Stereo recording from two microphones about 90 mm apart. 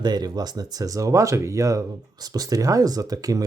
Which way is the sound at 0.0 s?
50° right (ahead or behind).